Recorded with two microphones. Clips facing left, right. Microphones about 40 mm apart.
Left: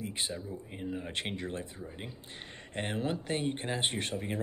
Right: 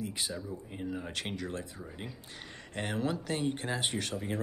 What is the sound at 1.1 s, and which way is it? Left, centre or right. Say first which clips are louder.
Speech: left 1 dB; left.